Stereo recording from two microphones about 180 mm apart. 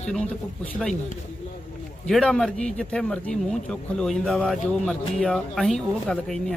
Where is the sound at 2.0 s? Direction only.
5° left (ahead or behind).